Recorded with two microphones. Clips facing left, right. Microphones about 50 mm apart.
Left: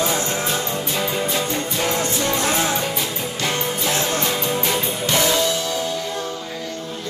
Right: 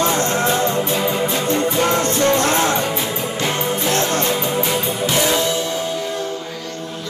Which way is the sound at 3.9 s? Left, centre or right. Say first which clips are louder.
Right 3 dB; centre.